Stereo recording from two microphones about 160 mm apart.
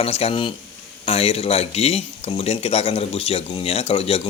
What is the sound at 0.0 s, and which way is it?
Speech, 40° left (ahead or behind).